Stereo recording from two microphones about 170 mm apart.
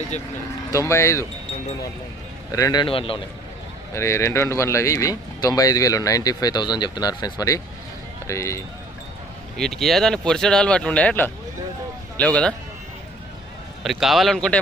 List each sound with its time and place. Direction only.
0.7 s speech: 15° left (ahead or behind)
2.5 s speech: 20° left (ahead or behind)
3.9 s speech: 15° left (ahead or behind)
9.6 s speech: centre (ahead or behind)
13.8 s speech: centre (ahead or behind)